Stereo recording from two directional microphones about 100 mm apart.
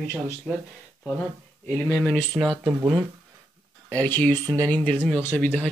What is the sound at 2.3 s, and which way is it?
Speech, 15° right (ahead or behind).